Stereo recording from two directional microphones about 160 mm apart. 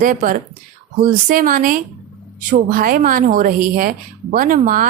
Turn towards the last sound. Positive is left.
turn(degrees=-60)  # may be behind; listen again after turning